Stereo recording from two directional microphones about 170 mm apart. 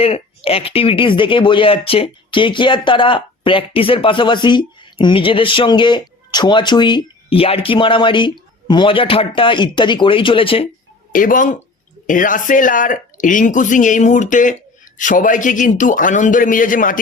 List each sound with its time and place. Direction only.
0.0 s speech: 35° left (ahead or behind)
11.1 s speech: 50° left (ahead or behind)